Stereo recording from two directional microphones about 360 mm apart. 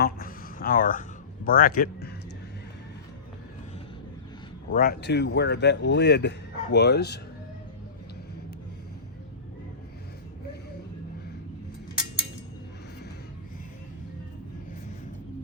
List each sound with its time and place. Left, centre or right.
0.0 s a sound: left
1.5 s speech: left
4.7 s speech: left